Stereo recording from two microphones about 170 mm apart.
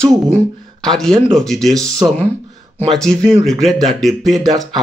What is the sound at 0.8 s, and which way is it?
Speech, 5° left (ahead or behind).